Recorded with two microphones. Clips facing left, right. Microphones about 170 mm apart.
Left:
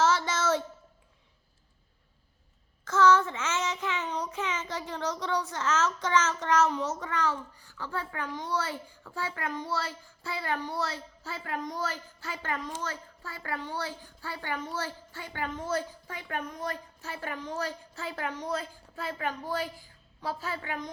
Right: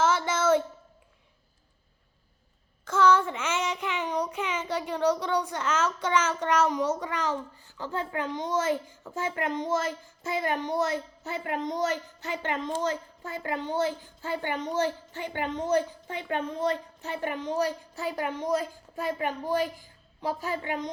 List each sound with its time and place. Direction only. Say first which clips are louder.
0.0 s a sound: right 2 dB; 10° right (ahead or behind)
2.8 s child singing: even; 10° right (ahead or behind)
7.0 s a child's voice: right 1 dB; 15° right (ahead or behind)